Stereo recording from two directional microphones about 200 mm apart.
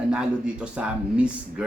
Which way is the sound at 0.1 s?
5° right (ahead or behind).